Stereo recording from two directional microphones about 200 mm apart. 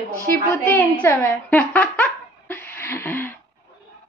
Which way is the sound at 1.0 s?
10° left (ahead or behind).